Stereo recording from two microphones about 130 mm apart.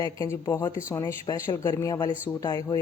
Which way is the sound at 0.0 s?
25° left (ahead or behind).